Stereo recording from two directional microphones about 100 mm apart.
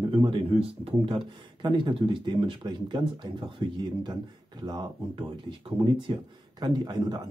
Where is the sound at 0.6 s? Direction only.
75° right (ahead or behind).